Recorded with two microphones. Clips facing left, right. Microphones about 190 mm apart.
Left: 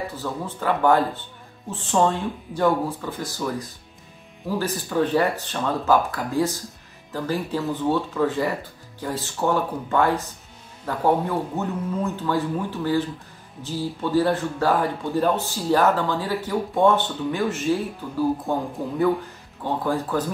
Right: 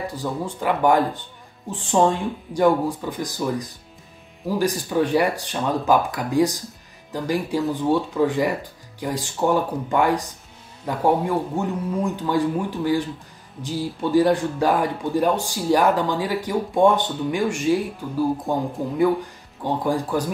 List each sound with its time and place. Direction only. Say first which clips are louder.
0.1 s speech: right 3 dB; 15° right (ahead or behind)